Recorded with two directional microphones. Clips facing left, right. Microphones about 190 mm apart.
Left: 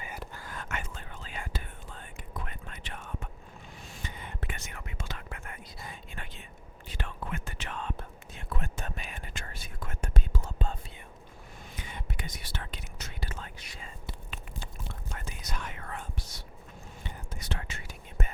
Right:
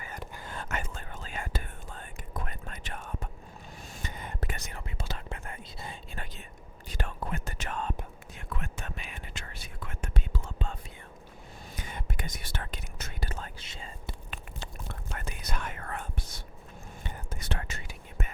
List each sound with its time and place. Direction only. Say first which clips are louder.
0.3 s whispering: right 5 dB; 25° right (ahead or behind); by 7.9 s 45° right (ahead or behind)
8.4 s whispering: left 2 dB; 35° left (ahead or behind)
11.8 s whispering: right 2 dB; 45° right (ahead or behind)
13.6 s whispering: right 2 dB; 30° right (ahead or behind)
15.2 s whispering: right 3 dB; 60° right (ahead or behind)
18.2 s whispering: left 2 dB; 40° left (ahead or behind)